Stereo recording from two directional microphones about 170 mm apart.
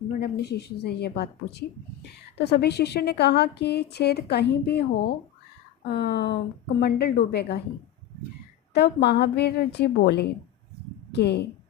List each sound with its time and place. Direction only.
0.2 s a woman's voice: 70° left (ahead or behind)
8.7 s a woman's voice: 75° left (ahead or behind)